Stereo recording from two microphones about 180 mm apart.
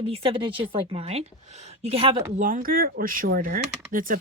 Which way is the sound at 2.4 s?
50° right (ahead or behind).